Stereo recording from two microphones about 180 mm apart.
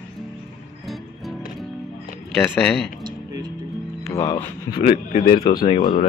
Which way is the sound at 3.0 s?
20° right (ahead or behind).